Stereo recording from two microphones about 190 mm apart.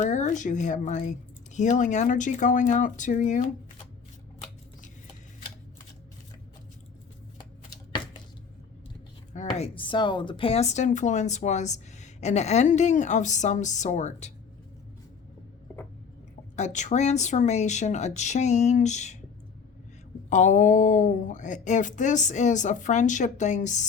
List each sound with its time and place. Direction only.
0.0 s speech: 40° left (ahead or behind)
9.3 s speech: 35° left (ahead or behind)
16.6 s speech: 40° left (ahead or behind)
20.3 s speech: 40° left (ahead or behind)